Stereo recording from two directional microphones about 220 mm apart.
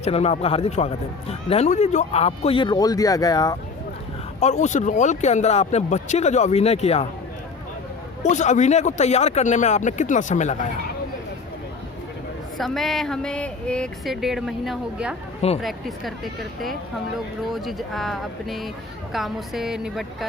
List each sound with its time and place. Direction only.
0.0 s speech: 30° left (ahead or behind)
4.4 s speech: 30° left (ahead or behind)
8.2 s speech: 35° left (ahead or behind)
12.5 s speech: centre (ahead or behind)